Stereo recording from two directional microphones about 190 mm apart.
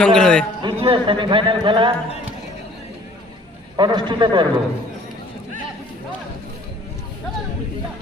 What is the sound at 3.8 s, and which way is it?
Speech, 25° right (ahead or behind).